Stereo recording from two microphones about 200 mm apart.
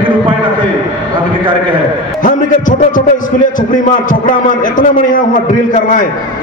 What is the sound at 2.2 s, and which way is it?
Music, 40° left (ahead or behind).